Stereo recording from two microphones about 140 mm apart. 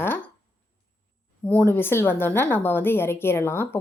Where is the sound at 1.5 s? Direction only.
15° left (ahead or behind).